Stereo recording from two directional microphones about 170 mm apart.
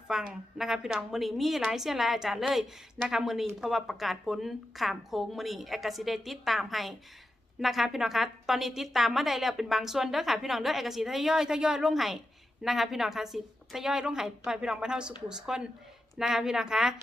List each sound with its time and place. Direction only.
0.1 s a woman's voice: 5° right (ahead or behind)